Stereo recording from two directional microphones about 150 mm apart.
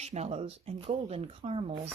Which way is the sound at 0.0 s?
45° right (ahead or behind).